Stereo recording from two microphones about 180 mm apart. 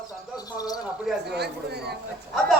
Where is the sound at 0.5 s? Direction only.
20° left (ahead or behind).